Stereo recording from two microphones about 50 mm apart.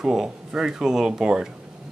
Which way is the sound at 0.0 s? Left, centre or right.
Centre.